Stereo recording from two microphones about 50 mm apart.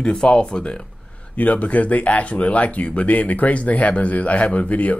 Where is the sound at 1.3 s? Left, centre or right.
Left.